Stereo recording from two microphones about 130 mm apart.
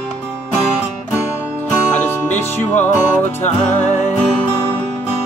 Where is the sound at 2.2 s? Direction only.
15° left (ahead or behind).